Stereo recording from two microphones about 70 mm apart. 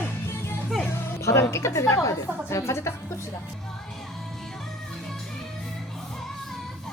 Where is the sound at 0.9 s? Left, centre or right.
Left.